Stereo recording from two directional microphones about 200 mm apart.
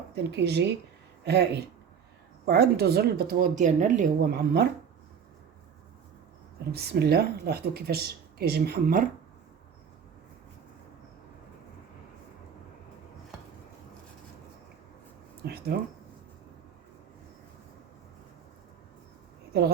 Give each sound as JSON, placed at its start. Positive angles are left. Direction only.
{"t": 0.2, "sound": "speech", "side_deg": -55}
{"t": 2.5, "sound": "speech", "side_deg": -55}
{"t": 6.7, "sound": "speech", "side_deg": -55}
{"t": 15.4, "sound": "speech", "side_deg": -50}